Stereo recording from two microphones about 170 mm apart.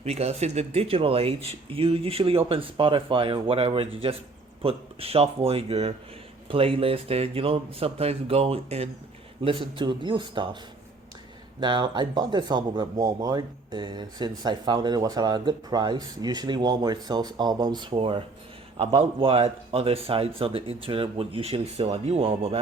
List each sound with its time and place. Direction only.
0.0 s speech: 40° right (ahead or behind)
11.6 s speech: 25° right (ahead or behind)